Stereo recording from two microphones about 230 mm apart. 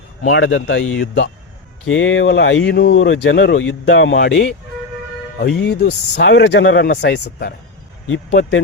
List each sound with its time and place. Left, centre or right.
0.3 s speech: left
5.4 s speech: left